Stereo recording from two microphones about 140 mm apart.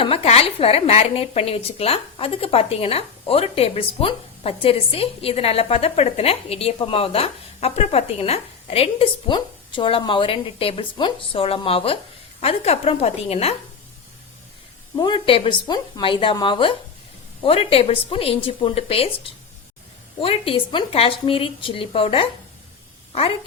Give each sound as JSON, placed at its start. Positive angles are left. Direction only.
{"t": 0.0, "sound": "a woman's voice", "side_deg": 45}
{"t": 14.9, "sound": "a woman's voice", "side_deg": 35}
{"t": 20.2, "sound": "a woman's voice", "side_deg": 40}